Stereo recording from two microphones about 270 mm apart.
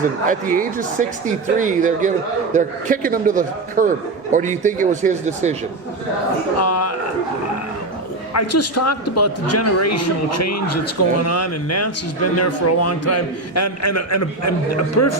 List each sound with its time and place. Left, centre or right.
0.3 s speech: right
6.6 s a man's voice: left
8.3 s a man's voice: left